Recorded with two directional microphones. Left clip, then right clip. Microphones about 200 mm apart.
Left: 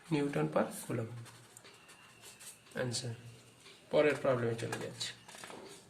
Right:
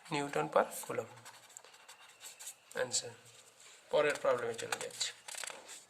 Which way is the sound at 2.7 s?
35° right (ahead or behind).